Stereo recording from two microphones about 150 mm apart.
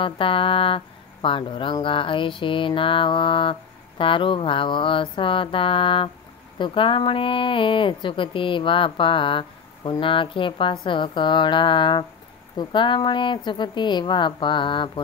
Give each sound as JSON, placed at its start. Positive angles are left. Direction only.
{"t": 0.0, "sound": "speech", "side_deg": 35}